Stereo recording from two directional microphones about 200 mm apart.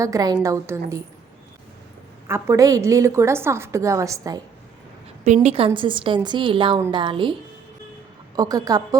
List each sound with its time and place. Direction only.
0.0 s a woman's voice: 15° right (ahead or behind)
2.2 s a woman's voice: 15° right (ahead or behind)
5.2 s a woman's voice: 35° right (ahead or behind)
8.4 s a woman's voice: 20° right (ahead or behind)